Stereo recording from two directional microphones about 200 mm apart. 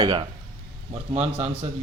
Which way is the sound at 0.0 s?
20° right (ahead or behind).